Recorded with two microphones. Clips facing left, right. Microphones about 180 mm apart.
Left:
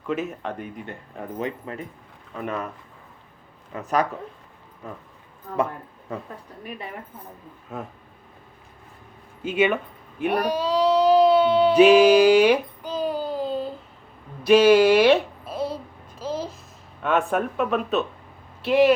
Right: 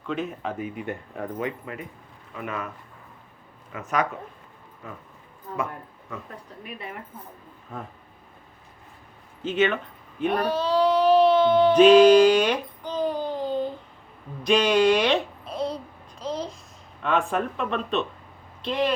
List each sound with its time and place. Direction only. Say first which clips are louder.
0.1 s speech: left 2 dB; 5° left (ahead or behind)
1.4 s speech: left 4 dB; 30° left (ahead or behind)
3.7 s speech: left 3 dB; 35° left (ahead or behind)
7.7 s speech: left 3 dB; 5° left (ahead or behind)
9.4 s speech: left 2 dB; 10° left (ahead or behind)
11.1 s a sound: even; 10° left (ahead or behind)
17.0 s speech: left 2 dB; 5° left (ahead or behind)